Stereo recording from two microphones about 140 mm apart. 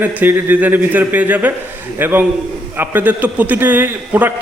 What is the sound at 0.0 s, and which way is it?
A man's voice, 10° right (ahead or behind).